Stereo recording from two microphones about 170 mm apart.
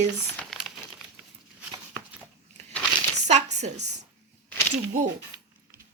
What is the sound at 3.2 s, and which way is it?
Speech, 45° right (ahead or behind).